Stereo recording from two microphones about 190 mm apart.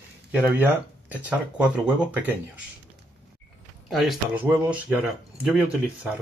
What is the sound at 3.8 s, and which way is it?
Speech, centre (ahead or behind).